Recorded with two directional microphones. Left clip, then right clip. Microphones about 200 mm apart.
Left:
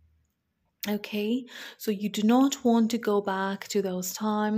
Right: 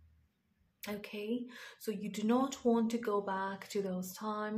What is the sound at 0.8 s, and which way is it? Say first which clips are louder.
Speech: left 11 dB; 45° left (ahead or behind).